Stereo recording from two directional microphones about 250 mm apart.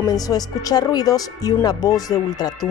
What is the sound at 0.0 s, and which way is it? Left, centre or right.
A woman's voice, centre.